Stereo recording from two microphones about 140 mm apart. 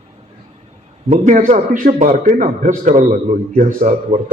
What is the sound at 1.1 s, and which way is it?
A man's voice, 60° right (ahead or behind).